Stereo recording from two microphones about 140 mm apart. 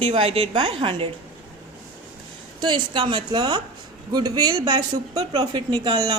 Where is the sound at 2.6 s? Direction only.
35° right (ahead or behind).